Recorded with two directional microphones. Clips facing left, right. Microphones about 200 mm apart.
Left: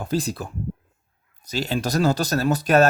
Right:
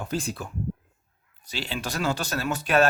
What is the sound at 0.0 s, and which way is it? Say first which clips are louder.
Speech: left 5 dB; 35° left (ahead or behind).